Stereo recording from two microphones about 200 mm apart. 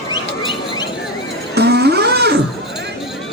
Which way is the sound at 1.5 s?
55° right (ahead or behind).